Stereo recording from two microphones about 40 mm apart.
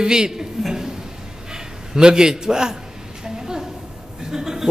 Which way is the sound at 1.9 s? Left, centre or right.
Centre.